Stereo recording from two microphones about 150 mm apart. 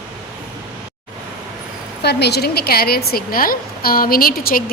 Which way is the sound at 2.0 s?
90° left.